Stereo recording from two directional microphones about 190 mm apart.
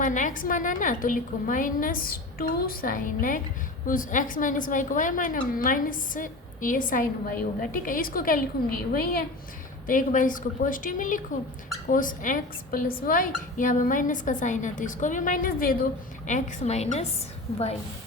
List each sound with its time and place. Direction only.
0.0 s a woman's voice: 40° left (ahead or behind)
16.2 s a woman's voice: 35° left (ahead or behind)